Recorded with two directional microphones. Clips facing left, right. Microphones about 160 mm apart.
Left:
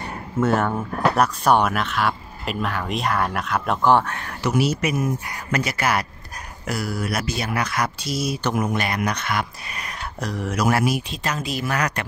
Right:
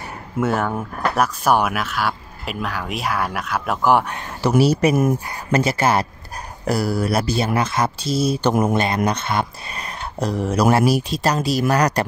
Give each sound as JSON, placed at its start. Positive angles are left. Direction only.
{"t": 0.4, "sound": "speech", "side_deg": 0}
{"t": 4.4, "sound": "speech", "side_deg": -35}